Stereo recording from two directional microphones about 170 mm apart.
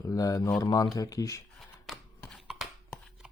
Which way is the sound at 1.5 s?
Centre (ahead or behind).